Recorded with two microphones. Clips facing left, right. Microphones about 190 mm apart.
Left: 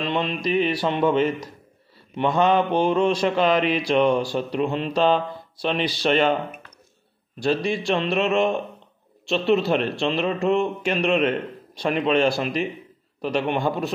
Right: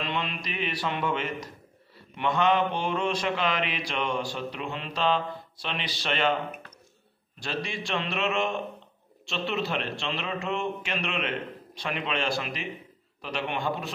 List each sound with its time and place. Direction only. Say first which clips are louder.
0.0 s mantra: left 8 dB; 30° left (ahead or behind)
7.4 s mantra: left 11 dB; 40° left (ahead or behind)